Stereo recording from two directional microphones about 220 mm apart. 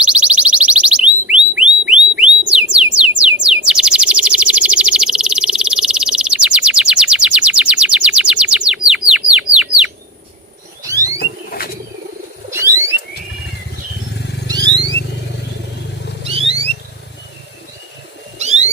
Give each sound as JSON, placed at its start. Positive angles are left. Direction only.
{"t": 0.0, "sound": "alarm", "side_deg": -5}
{"t": 2.7, "sound": "a sound", "side_deg": -5}
{"t": 3.2, "sound": "bird", "side_deg": -5}
{"t": 10.8, "sound": "alarm", "side_deg": -15}
{"t": 11.2, "sound": "a sound", "side_deg": 45}
{"t": 12.5, "sound": "alarm", "side_deg": -10}
{"t": 14.4, "sound": "vehicle", "side_deg": -20}
{"t": 16.2, "sound": "vehicle", "side_deg": -25}
{"t": 18.3, "sound": "a sound", "side_deg": -30}